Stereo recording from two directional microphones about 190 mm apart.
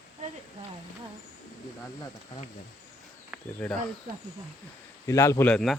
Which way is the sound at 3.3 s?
10° right (ahead or behind).